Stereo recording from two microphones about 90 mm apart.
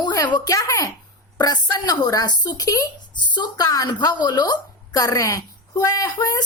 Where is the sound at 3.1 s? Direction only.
55° left (ahead or behind).